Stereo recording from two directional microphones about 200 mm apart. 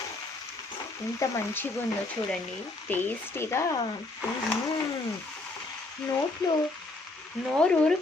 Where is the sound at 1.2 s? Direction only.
15° left (ahead or behind).